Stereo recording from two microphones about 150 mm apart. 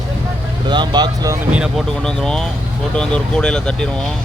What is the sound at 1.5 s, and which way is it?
Speech, 5° right (ahead or behind).